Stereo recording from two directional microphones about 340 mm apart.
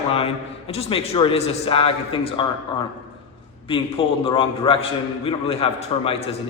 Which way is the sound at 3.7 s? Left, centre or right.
Centre.